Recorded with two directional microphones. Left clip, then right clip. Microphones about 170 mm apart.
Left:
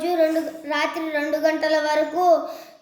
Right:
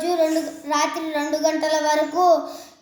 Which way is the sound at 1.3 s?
40° right (ahead or behind).